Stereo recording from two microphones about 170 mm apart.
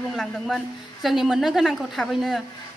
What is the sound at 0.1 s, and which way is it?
A woman's voice, centre (ahead or behind).